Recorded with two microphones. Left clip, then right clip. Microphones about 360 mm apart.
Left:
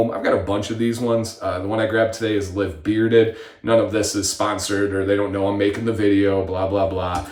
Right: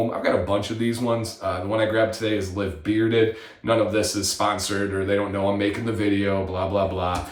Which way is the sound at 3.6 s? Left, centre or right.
Centre.